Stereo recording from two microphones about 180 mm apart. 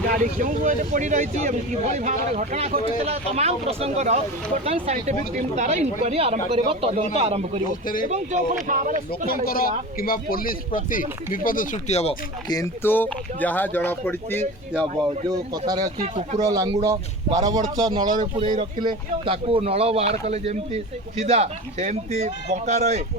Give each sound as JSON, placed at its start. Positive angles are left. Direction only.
{"t": 0.1, "sound": "speech", "side_deg": -50}
{"t": 8.7, "sound": "speech", "side_deg": -50}
{"t": 9.5, "sound": "speech", "side_deg": 55}
{"t": 12.5, "sound": "speech", "side_deg": 20}
{"t": 15.0, "sound": "a man's voice", "side_deg": -20}